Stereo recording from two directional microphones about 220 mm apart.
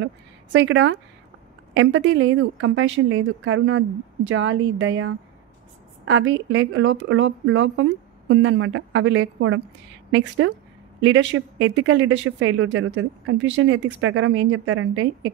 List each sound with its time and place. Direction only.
0.0 s speech: 60° right (ahead or behind)